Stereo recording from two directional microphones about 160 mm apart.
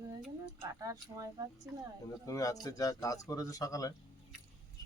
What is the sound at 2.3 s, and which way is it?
Speech, 20° left (ahead or behind).